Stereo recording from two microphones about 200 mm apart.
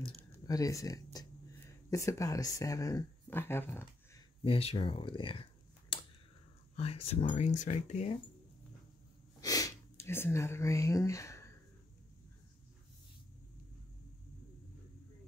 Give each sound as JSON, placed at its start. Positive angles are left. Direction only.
{"t": 0.1, "sound": "speech", "side_deg": 15}
{"t": 4.4, "sound": "a sound", "side_deg": 30}
{"t": 6.8, "sound": "speech", "side_deg": 30}
{"t": 9.4, "sound": "speech", "side_deg": 20}